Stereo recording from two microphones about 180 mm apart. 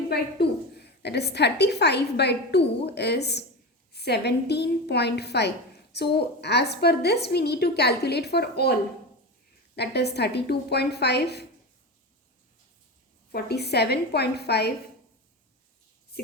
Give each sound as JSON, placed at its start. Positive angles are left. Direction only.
{"t": 0.1, "sound": "a woman's voice", "side_deg": 65}
{"t": 9.7, "sound": "a woman's voice", "side_deg": 65}
{"t": 13.3, "sound": "a woman's voice", "side_deg": 65}